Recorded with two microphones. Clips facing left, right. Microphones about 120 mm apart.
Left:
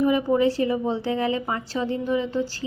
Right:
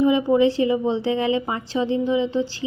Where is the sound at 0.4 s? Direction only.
35° left (ahead or behind).